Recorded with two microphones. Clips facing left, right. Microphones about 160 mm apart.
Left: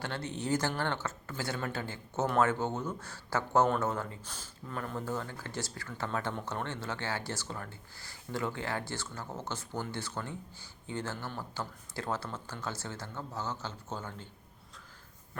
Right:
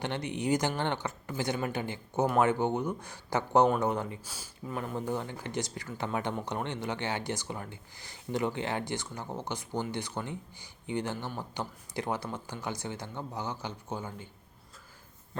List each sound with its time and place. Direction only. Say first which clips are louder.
0.0 s speech: right 4 dB; 15° right (ahead or behind)